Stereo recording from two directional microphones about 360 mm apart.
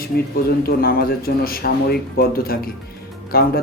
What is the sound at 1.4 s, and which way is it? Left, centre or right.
A man's voice, left.